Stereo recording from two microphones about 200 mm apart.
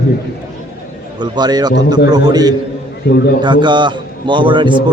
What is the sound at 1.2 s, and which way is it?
A man's voice, 20° right (ahead or behind).